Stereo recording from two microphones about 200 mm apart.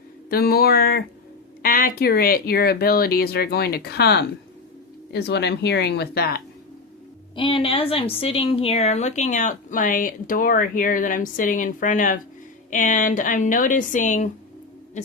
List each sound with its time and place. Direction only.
0.3 s speech: 50° left (ahead or behind)
7.3 s a woman's voice: 25° left (ahead or behind)